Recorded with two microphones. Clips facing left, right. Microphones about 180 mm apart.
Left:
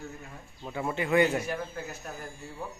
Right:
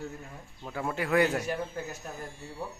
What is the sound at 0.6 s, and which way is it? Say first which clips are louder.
Speech: left 1 dB; 5° left (ahead or behind).